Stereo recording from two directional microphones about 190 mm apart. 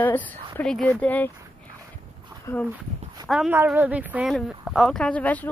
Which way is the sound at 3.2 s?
Centre (ahead or behind).